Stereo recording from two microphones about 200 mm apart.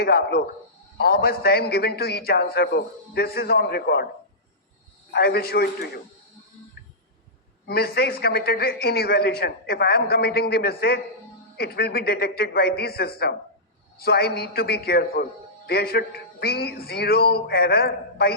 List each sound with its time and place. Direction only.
0.0 s a man's voice: 50° left (ahead or behind)
5.1 s a man's voice: 50° left (ahead or behind)
7.7 s a man's voice: 50° left (ahead or behind)